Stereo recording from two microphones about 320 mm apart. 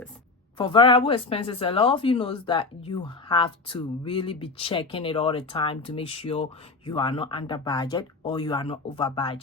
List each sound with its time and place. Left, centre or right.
0.5 s speech: centre